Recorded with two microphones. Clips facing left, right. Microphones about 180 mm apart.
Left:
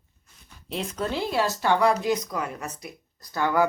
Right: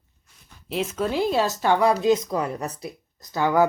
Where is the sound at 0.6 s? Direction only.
5° right (ahead or behind).